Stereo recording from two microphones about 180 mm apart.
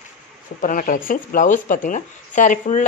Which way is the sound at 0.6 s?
50° left (ahead or behind).